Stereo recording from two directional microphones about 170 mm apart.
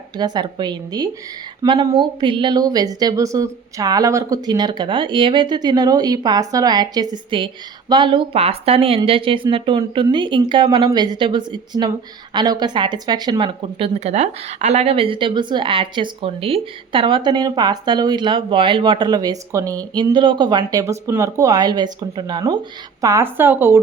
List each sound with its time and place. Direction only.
0.2 s speech: 25° right (ahead or behind)